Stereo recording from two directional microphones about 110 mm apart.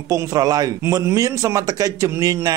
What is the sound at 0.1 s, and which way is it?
Speech, 30° right (ahead or behind).